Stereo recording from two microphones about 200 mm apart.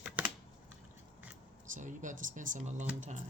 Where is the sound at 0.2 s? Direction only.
5° right (ahead or behind).